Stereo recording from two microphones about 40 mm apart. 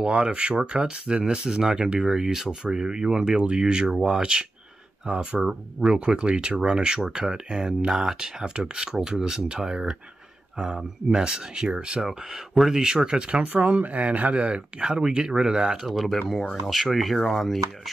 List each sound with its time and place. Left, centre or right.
0.0 s speech: right
11.1 s speech: centre
12.1 s speech: centre
12.8 s speech: right
13.5 s speech: right
14.9 s speech: centre
15.9 s speech: centre